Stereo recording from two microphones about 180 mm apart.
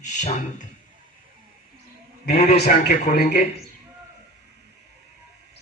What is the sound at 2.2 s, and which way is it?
A man's voice, 60° left (ahead or behind).